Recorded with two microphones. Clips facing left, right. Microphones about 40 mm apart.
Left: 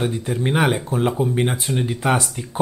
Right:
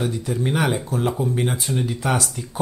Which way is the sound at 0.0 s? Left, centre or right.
Left.